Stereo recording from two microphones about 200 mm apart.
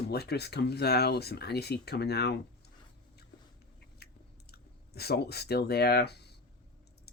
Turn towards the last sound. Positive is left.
turn(degrees=55)  # may be behind; listen again after turning